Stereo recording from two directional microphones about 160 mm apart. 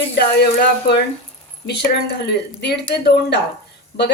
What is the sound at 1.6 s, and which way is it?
A woman's voice, 90° left.